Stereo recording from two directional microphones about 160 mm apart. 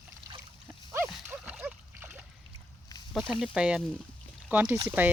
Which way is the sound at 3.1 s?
5° right (ahead or behind).